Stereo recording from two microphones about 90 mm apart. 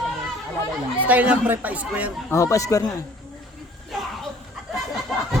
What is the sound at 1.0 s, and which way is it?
Speech, 15° right (ahead or behind).